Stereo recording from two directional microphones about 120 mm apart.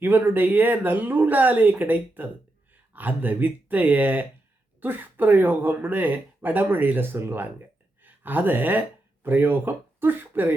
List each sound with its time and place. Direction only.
0.0 s speech: 15° right (ahead or behind)